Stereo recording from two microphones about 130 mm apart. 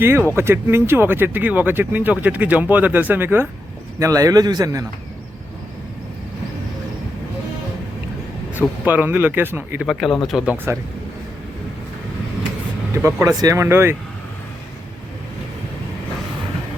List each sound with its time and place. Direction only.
0.0 s speech: 20° right (ahead or behind)
4.0 s speech: 25° right (ahead or behind)
8.8 s speech: 15° right (ahead or behind)
9.8 s speech: centre (ahead or behind)
12.9 s speech: 20° right (ahead or behind)